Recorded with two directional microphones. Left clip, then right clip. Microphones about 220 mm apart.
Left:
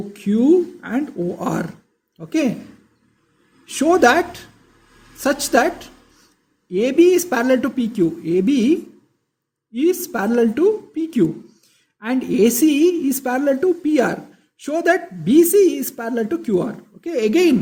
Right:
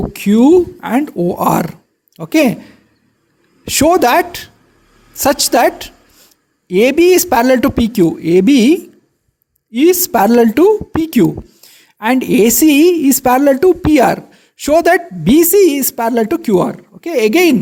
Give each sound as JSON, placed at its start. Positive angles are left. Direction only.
{"t": 0.1, "sound": "a woman's voice", "side_deg": -40}
{"t": 3.7, "sound": "a woman's voice", "side_deg": -40}